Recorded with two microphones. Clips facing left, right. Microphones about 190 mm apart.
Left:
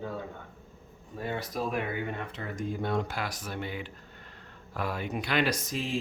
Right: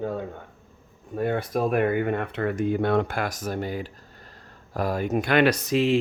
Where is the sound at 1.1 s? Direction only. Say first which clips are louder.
Right 9 dB; 55° right (ahead or behind).